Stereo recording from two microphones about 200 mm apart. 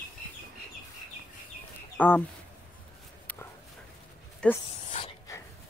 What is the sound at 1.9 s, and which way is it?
Speech, 10° left (ahead or behind).